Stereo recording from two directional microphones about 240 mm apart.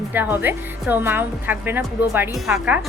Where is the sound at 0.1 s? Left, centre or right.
Centre.